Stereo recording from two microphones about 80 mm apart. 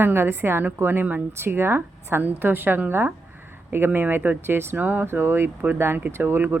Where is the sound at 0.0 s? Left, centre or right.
Right.